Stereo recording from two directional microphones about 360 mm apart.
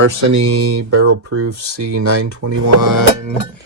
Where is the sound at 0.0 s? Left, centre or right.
Right.